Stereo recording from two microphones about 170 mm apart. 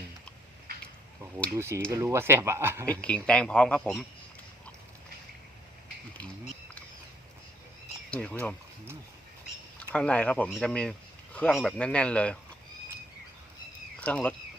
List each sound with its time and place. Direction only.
1.5 s speech: 15° right (ahead or behind)
2.8 s a man's voice: 10° left (ahead or behind)
8.1 s a man's voice: 5° left (ahead or behind)
9.7 s a man's voice: 5° left (ahead or behind)
14.0 s a man's voice: 10° left (ahead or behind)